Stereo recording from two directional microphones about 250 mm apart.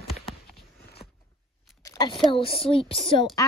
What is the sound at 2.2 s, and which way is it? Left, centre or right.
Speech, left.